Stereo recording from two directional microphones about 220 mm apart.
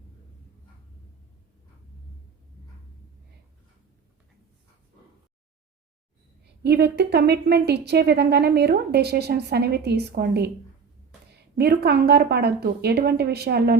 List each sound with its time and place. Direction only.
6.4 s a woman's voice: 45° right (ahead or behind)
11.5 s a woman's voice: 45° right (ahead or behind)